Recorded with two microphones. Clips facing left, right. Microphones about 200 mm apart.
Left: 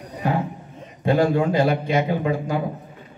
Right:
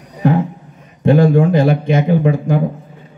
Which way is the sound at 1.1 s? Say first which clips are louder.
Right 6 dB; 50° right (ahead or behind).